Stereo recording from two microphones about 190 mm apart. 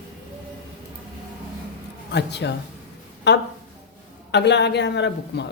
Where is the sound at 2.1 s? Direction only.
65° left (ahead or behind).